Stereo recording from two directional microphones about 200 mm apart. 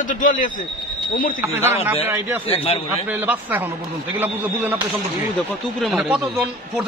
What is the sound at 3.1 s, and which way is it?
A man's voice, 10° right (ahead or behind).